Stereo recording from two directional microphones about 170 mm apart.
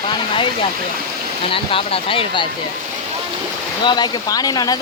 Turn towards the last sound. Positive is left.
turn(degrees=20)  # may be behind; listen again after turning